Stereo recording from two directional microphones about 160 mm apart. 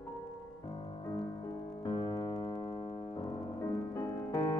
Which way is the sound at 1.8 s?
30° left (ahead or behind).